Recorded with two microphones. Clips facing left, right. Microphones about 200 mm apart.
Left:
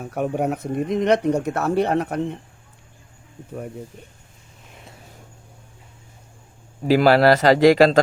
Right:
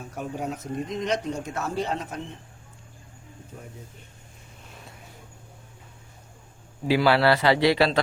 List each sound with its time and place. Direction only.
0.0 s speech: 60° left (ahead or behind)
6.8 s speech: 40° left (ahead or behind)